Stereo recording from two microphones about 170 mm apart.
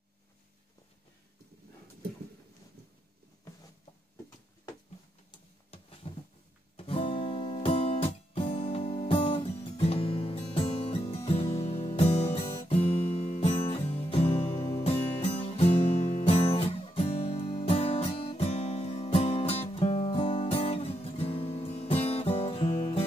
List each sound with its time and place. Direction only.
6.0 s a sound: 35° left (ahead or behind)
6.8 s music: 35° left (ahead or behind)
12.6 s guitar: 35° left (ahead or behind)
13.1 s music: 40° left (ahead or behind)
22.8 s music: 25° left (ahead or behind)